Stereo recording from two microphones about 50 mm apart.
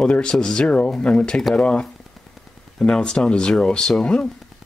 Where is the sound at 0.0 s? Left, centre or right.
Centre.